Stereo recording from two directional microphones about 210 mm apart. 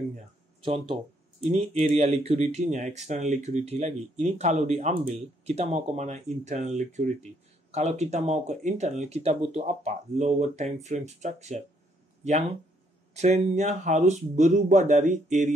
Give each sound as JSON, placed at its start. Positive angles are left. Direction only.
{"t": 0.6, "sound": "speech", "side_deg": -25}